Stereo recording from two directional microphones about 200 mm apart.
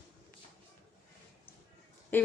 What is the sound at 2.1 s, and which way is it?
Speech, 10° left (ahead or behind).